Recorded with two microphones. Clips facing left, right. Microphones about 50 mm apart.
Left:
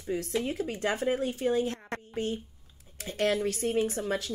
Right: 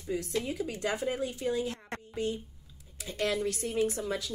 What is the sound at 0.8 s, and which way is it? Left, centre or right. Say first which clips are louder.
Speech: left 4 dB; left.